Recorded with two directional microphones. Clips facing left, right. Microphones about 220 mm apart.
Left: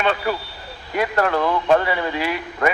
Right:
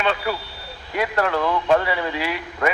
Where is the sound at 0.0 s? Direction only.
45° left (ahead or behind).